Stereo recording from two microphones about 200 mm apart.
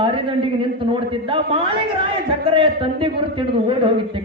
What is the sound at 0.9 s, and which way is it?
A man's voice, 25° right (ahead or behind).